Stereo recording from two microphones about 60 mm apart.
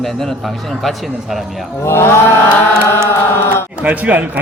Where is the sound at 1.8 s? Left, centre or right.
Left.